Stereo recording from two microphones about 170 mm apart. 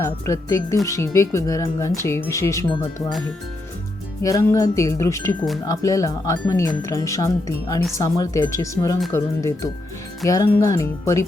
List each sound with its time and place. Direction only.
0.0 s speech: 20° left (ahead or behind)
0.9 s music: 15° left (ahead or behind)
4.2 s music: 20° left (ahead or behind)
5.6 s speech: 20° left (ahead or behind)
7.9 s music: 20° left (ahead or behind)